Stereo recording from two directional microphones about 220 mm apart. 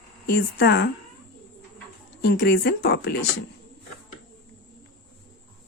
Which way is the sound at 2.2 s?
45° left (ahead or behind).